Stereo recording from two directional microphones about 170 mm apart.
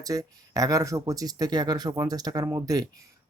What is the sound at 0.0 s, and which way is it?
Speech, 20° right (ahead or behind).